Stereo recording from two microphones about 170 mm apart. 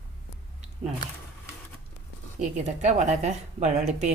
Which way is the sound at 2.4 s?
45° right (ahead or behind).